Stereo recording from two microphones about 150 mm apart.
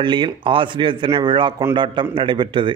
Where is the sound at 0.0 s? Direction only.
30° right (ahead or behind).